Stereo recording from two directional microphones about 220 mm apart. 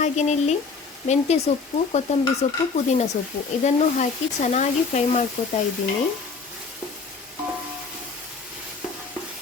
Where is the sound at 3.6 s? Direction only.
30° left (ahead or behind).